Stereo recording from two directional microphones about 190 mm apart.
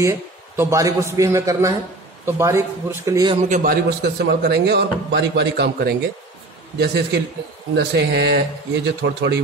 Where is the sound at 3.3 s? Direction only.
40° right (ahead or behind).